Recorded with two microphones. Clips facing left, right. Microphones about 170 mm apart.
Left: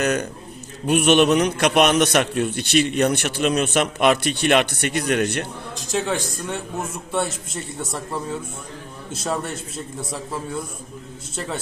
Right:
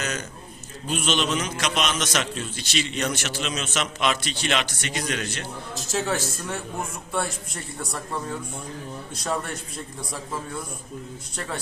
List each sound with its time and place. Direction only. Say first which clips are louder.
0.0 s a sound: left 9 dB; 60° left (ahead or behind)
0.9 s a man's voice: left 10 dB; 65° left (ahead or behind)
5.7 s a man's voice: left 3 dB; 5° right (ahead or behind)
9.2 s a man's voice: left 3 dB; centre (ahead or behind)